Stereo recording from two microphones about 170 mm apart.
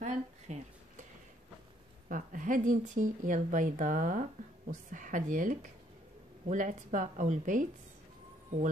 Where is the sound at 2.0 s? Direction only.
50° right (ahead or behind).